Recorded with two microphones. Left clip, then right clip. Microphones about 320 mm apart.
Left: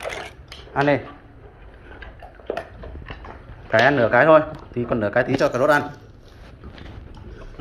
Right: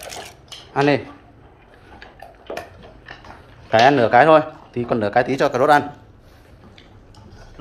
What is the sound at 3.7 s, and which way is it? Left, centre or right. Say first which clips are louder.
Speech: right 3 dB; centre.